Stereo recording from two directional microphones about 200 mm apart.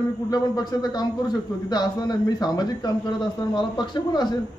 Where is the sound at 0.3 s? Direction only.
20° left (ahead or behind).